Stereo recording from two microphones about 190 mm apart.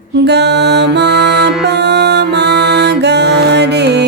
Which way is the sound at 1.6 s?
60° right (ahead or behind).